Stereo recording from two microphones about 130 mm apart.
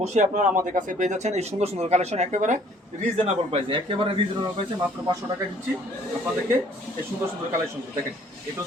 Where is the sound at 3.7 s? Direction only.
40° right (ahead or behind).